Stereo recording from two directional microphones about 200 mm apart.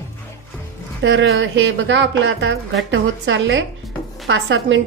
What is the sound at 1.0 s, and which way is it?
A woman's voice, 65° right (ahead or behind).